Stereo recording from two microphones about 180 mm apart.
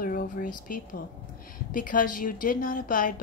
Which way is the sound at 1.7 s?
50° left (ahead or behind).